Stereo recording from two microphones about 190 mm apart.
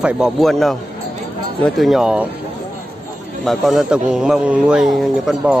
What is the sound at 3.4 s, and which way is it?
A man's voice, centre (ahead or behind).